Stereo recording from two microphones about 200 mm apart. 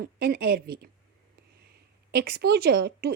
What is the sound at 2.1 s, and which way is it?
Speech, 50° right (ahead or behind).